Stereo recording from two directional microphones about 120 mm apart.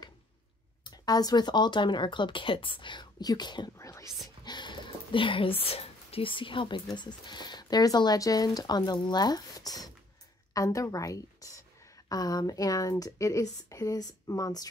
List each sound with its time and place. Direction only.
0.8 s speech: 35° left (ahead or behind)
3.7 s whispering: 25° left (ahead or behind)
4.5 s a woman's voice: 40° left (ahead or behind)